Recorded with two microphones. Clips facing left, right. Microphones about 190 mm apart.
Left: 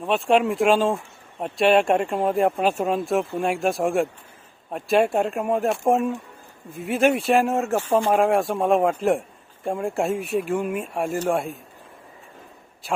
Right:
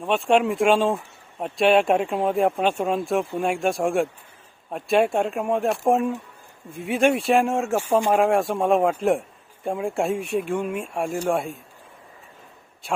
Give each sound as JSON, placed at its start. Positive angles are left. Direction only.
{"t": 0.0, "sound": "speech", "side_deg": 0}